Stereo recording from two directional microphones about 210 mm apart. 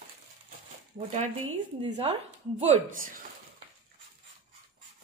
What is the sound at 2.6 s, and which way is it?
Speech, 30° right (ahead or behind).